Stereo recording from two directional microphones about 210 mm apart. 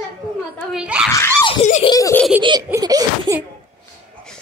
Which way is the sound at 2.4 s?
20° right (ahead or behind).